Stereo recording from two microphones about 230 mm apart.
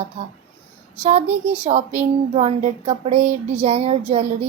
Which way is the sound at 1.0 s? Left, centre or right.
Right.